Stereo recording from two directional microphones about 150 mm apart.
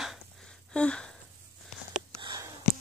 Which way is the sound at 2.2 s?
30° right (ahead or behind).